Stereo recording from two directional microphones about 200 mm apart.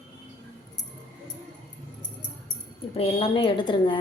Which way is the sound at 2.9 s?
30° left (ahead or behind).